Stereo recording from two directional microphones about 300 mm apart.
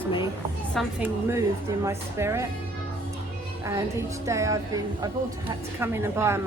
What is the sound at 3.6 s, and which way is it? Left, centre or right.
Speech, centre.